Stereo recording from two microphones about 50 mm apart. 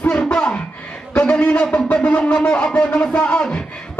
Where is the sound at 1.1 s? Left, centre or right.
Left.